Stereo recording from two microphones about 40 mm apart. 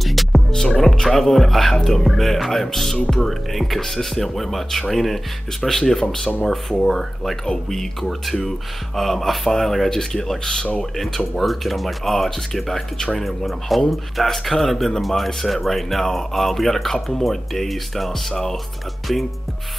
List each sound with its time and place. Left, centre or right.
0.0 s music: centre
0.5 s speech: centre
11.0 s speech: centre
12.9 s speech: centre
13.2 s speech: centre